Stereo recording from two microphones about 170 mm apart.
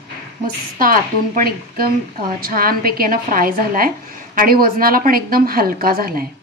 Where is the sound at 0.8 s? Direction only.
55° right (ahead or behind).